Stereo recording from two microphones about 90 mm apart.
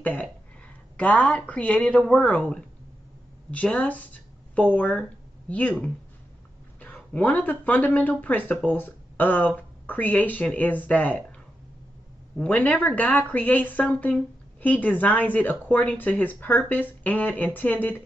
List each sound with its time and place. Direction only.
0.0 s speech: 15° left (ahead or behind)
3.6 s speech: 15° left (ahead or behind)
12.4 s speech: 15° left (ahead or behind)